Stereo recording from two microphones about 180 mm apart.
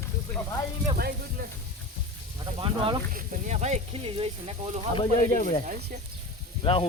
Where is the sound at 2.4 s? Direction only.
25° right (ahead or behind).